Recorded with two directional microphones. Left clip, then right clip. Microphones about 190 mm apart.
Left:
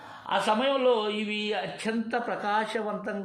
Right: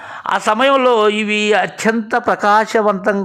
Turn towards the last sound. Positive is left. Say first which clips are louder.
# right 17 dB
turn(degrees=-40)  # may be behind; listen again after turning